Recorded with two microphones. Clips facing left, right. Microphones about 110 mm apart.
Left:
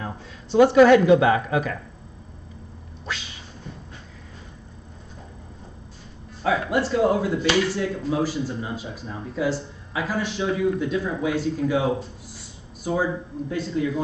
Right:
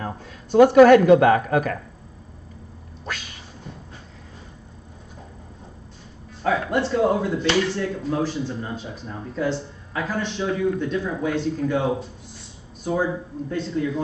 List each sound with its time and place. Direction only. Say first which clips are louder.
0.0 s a sound: right 2 dB; 50° right (ahead or behind)
0.7 s a woman's voice: right 3 dB; 50° right (ahead or behind)
3.1 s cat: even; 50° right (ahead or behind)
6.4 s speech: even; 5° left (ahead or behind)